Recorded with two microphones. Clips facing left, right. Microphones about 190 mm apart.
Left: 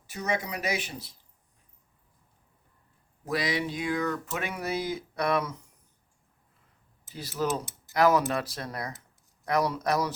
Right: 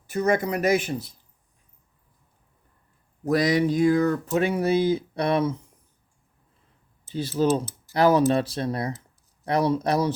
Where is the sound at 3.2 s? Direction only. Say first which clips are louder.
Right 9 dB; 45° right (ahead or behind); by 5.5 s 30° right (ahead or behind).